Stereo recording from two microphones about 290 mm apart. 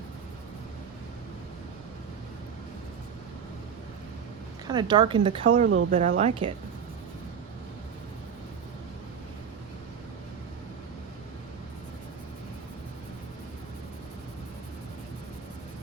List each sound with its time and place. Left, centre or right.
4.6 s speech: centre